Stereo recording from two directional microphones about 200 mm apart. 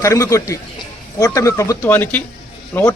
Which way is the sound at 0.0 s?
15° left (ahead or behind).